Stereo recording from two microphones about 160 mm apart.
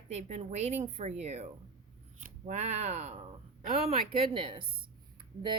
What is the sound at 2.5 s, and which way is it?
Speech, 45° right (ahead or behind).